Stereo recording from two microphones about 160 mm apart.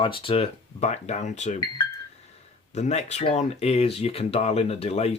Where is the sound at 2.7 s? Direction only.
45° left (ahead or behind).